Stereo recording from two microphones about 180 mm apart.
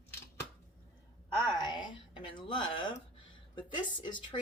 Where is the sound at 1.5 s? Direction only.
25° left (ahead or behind).